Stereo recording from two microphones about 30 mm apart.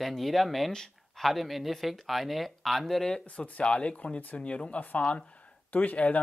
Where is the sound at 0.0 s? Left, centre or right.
Centre.